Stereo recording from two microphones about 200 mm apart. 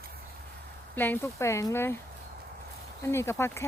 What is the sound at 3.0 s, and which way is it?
Speech, 15° left (ahead or behind).